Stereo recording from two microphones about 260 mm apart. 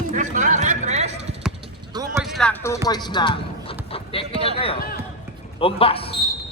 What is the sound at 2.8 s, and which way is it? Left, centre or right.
Speech, centre.